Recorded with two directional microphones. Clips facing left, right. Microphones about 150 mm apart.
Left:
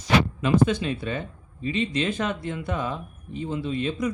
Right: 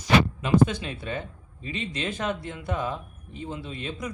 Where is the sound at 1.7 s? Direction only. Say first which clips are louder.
Left 6 dB; 45° right (ahead or behind).